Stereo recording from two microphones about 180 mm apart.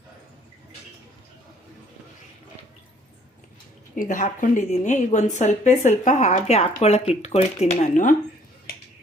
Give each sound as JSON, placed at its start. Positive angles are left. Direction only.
{"t": 3.9, "sound": "a woman's voice", "side_deg": 45}